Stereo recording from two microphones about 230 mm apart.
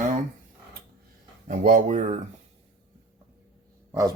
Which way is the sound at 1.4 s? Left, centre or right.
Right.